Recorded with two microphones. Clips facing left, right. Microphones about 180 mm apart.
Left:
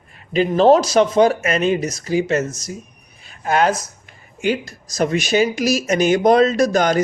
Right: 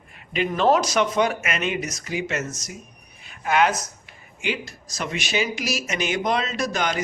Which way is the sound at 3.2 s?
35° left (ahead or behind).